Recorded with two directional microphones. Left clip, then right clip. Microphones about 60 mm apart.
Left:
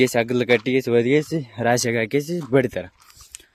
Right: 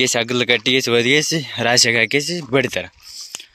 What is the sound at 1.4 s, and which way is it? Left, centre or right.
Speech, centre.